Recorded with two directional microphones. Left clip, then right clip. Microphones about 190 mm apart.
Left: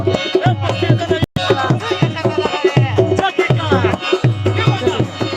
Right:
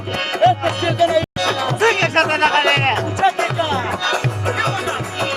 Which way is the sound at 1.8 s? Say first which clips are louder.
Right 5 dB; 55° right (ahead or behind).